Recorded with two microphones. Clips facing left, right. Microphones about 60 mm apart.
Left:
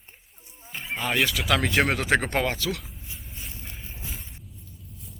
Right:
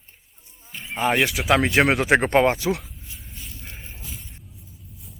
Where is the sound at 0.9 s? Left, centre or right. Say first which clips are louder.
Right 4 dB; right.